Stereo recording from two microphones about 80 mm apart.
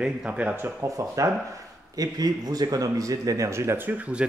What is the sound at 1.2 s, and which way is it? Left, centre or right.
Speech, right.